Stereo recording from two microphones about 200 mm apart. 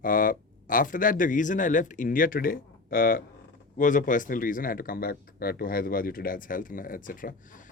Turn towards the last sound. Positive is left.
turn(degrees=40)  # may be behind; listen again after turning